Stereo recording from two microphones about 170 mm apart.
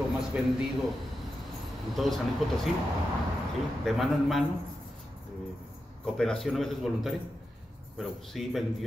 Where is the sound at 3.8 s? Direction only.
Centre (ahead or behind).